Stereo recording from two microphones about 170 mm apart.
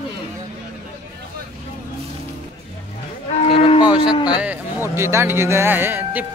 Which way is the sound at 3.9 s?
25° left (ahead or behind).